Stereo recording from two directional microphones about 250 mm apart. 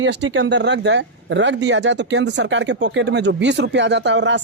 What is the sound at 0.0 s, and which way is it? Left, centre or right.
Speech, right.